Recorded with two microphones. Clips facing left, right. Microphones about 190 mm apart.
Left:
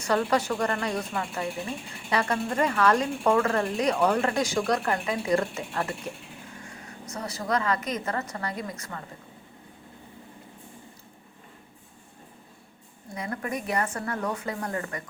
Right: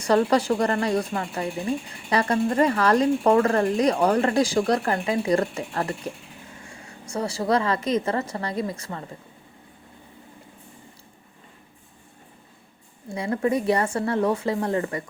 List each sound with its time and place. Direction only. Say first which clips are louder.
0.0 s speech: right 5 dB; 35° right (ahead or behind)
7.1 s speech: right 6 dB; 30° right (ahead or behind)
13.1 s speech: right 9 dB; 25° right (ahead or behind)